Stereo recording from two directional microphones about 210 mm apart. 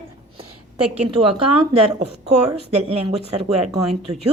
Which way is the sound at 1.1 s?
25° right (ahead or behind).